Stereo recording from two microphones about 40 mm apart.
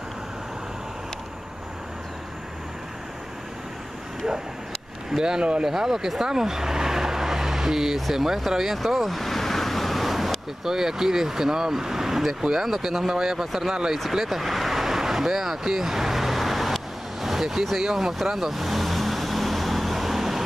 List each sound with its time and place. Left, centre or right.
5.1 s speech: centre
5.4 s speech: right
5.7 s speech: centre
8.9 s a sound: centre
10.6 s speech: centre
14.1 s vehicle: centre